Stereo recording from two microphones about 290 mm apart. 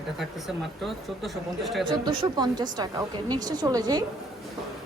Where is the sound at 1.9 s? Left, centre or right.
Centre.